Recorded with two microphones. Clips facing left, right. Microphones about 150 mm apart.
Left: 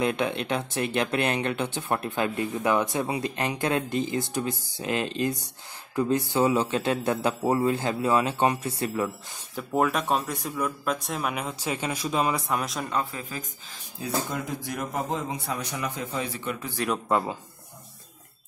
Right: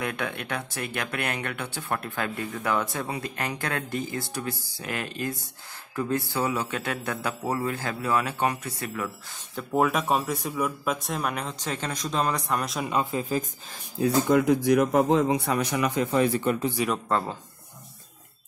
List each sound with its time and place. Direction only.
0.0 s speech: 20° left (ahead or behind)
9.6 s speech: centre (ahead or behind)
12.9 s speech: 25° right (ahead or behind)
14.3 s a man's voice: 75° right (ahead or behind)
16.7 s speech: centre (ahead or behind)